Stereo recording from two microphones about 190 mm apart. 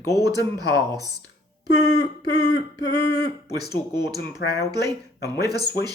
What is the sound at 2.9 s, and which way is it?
Speech, 60° left (ahead or behind).